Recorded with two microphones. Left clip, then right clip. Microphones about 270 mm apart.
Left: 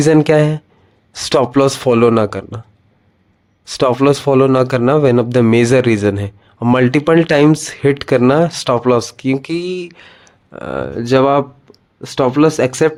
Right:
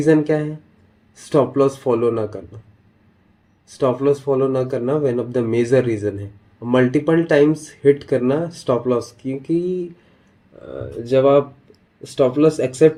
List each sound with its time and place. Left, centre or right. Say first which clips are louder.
0.0 s a man's voice: left 6 dB; left
3.7 s a man's voice: left 5 dB; left